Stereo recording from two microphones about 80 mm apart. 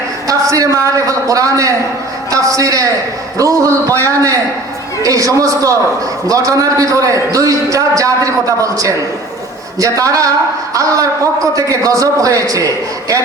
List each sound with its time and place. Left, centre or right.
0.3 s a woman's voice: right